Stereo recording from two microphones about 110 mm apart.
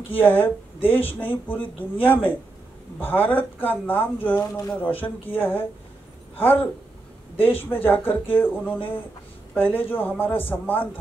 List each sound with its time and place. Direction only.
0.1 s speech: 15° left (ahead or behind)